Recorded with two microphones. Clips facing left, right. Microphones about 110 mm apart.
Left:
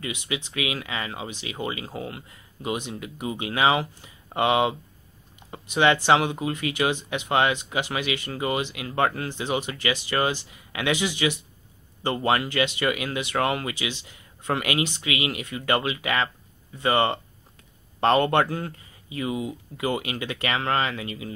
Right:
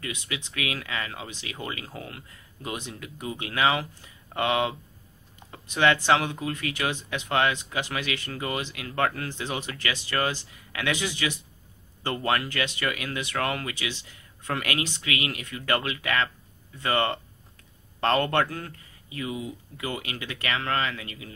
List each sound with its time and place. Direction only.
0.0 s speech: 15° left (ahead or behind)